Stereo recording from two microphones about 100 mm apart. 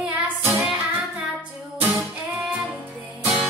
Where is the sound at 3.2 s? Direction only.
15° right (ahead or behind).